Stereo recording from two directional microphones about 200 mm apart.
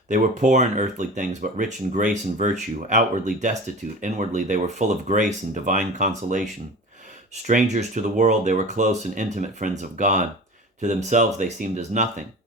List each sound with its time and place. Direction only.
0.1 s speech: 35° right (ahead or behind)